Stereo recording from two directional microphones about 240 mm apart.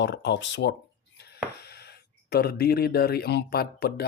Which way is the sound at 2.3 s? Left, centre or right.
Left.